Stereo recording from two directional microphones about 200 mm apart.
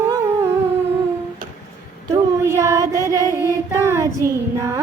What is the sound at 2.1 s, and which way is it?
Child singing, 15° right (ahead or behind).